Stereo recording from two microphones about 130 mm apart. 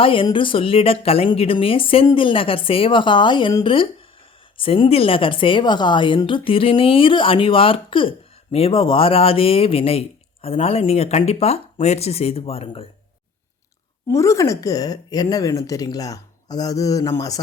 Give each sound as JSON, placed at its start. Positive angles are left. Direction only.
{"t": 0.0, "sound": "a woman's voice", "side_deg": 40}
{"t": 14.1, "sound": "speech", "side_deg": 25}